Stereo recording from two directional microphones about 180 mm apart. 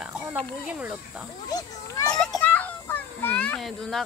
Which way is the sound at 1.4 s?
20° left (ahead or behind).